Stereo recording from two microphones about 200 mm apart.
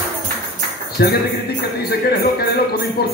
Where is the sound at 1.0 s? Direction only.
50° left (ahead or behind).